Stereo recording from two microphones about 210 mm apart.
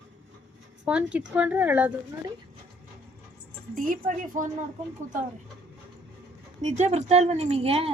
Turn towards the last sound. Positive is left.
turn(degrees=-30)  # may be behind; listen again after turning